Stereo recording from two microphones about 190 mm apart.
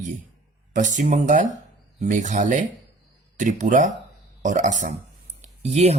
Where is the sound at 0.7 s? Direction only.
40° right (ahead or behind).